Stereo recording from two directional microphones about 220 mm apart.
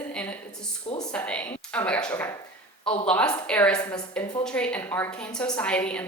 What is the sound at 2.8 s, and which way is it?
Speech, 25° left (ahead or behind).